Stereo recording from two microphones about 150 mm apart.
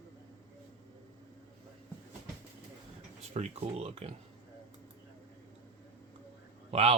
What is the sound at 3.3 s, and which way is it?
Speech, 45° right (ahead or behind).